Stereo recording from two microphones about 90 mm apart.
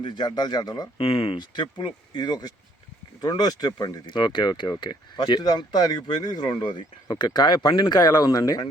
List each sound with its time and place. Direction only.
0.0 s speech: 55° left (ahead or behind)
0.9 s speech: 90° left; by 8.7 s 45° left (ahead or behind)